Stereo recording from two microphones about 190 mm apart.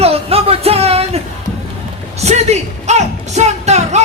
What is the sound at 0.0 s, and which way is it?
Music, 30° right (ahead or behind).